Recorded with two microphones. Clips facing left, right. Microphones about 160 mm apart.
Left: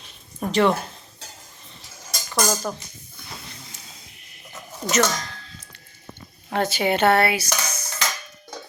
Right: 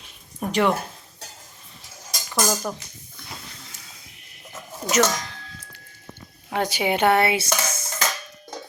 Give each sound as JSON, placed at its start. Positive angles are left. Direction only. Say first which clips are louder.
{"t": 0.3, "sound": "speech", "louder": "left 2 dB", "side_deg": -10}
{"t": 2.0, "sound": "cutlery", "louder": "left 1 dB", "side_deg": 0}
{"t": 4.8, "sound": "a woman's voice", "louder": "right 1 dB", "side_deg": -10}
{"t": 6.5, "sound": "a woman's voice", "louder": "left 1 dB", "side_deg": -10}
{"t": 7.3, "sound": "dishes", "louder": "right 1 dB", "side_deg": -25}